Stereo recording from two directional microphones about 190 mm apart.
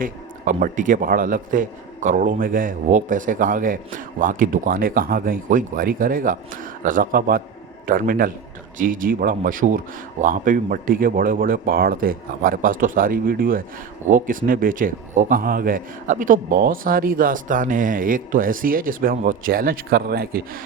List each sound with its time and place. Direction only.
0.0 s a man's voice: 45° right (ahead or behind)